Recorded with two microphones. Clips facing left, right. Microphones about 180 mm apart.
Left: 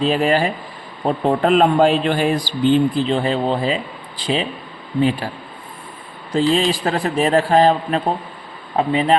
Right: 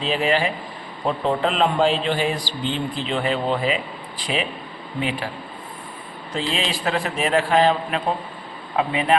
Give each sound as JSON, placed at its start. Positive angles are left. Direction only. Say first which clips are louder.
{"t": 0.0, "sound": "a man's voice", "louder": "left 4 dB", "side_deg": 45}
{"t": 3.1, "sound": "a man's voice", "louder": "left 4 dB", "side_deg": 35}
{"t": 6.3, "sound": "a man's voice", "louder": "left 9 dB", "side_deg": 40}